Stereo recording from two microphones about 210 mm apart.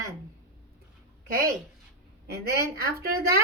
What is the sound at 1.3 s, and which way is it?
A woman's voice, 45° right (ahead or behind).